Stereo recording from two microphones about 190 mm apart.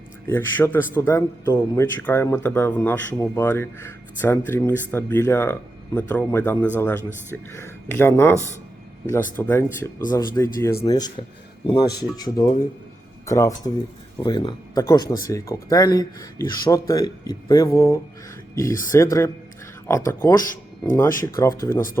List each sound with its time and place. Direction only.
0.3 s speech: 10° left (ahead or behind)